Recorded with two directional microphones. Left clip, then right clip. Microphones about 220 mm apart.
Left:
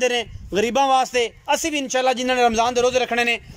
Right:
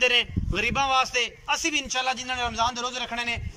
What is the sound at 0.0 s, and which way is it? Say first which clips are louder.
A man's voice: even; 30° left (ahead or behind).